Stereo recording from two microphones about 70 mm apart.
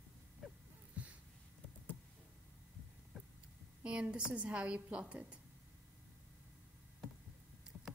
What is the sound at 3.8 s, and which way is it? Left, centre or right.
A woman's voice, centre.